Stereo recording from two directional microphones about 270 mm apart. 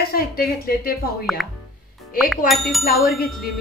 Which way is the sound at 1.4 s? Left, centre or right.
Centre.